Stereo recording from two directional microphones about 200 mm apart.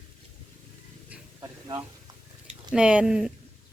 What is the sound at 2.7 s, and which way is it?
Speech, 5° right (ahead or behind).